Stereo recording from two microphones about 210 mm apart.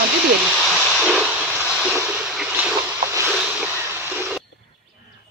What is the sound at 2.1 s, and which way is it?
Boat, centre (ahead or behind).